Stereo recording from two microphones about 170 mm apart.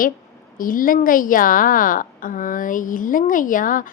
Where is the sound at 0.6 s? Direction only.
55° left (ahead or behind).